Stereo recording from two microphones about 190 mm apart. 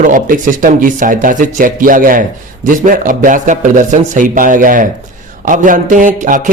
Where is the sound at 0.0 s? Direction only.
45° right (ahead or behind).